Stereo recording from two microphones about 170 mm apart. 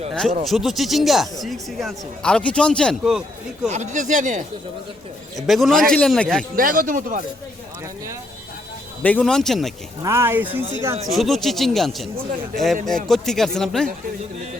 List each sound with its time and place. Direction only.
0.1 s speech: centre (ahead or behind)
3.7 s speech: 45° right (ahead or behind)
5.4 s speech: centre (ahead or behind)
6.6 s speech: 55° right (ahead or behind)
9.0 s speech: 5° left (ahead or behind)
10.0 s speech: 15° right (ahead or behind)
11.1 s speech: centre (ahead or behind)
13.1 s speech: centre (ahead or behind)